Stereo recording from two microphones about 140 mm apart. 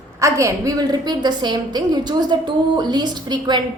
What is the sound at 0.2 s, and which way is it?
A woman's voice, 20° right (ahead or behind).